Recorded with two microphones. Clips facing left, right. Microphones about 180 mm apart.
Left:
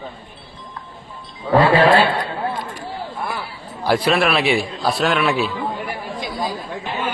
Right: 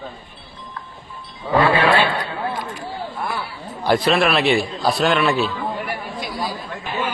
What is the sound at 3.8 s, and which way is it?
A man's voice, 10° left (ahead or behind).